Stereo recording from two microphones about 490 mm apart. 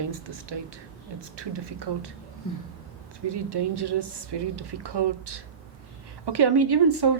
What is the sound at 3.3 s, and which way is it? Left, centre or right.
A woman's voice, right.